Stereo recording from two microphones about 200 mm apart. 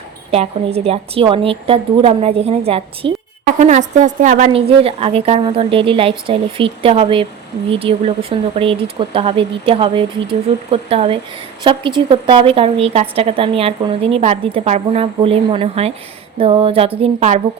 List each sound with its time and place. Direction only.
0.3 s a woman's voice: 30° right (ahead or behind)